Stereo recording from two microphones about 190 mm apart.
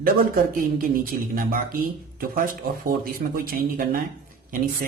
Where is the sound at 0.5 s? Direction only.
45° right (ahead or behind).